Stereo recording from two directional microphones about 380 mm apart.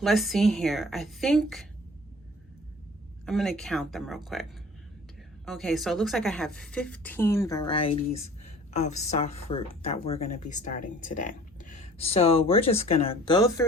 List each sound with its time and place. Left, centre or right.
0.0 s a woman's voice: centre
3.2 s a woman's voice: centre
5.5 s a woman's voice: centre